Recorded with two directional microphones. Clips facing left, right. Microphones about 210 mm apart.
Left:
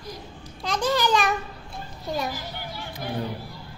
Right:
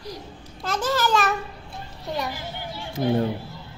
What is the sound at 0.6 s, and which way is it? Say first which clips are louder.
Babbling: even; 5° right (ahead or behind).